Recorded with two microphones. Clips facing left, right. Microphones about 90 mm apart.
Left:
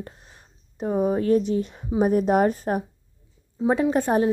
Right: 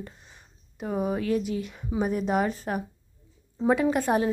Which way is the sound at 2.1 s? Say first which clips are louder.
Left 7 dB; 45° left (ahead or behind).